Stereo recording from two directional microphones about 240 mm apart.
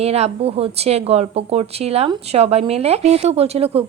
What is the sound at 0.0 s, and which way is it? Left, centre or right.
Speech, right.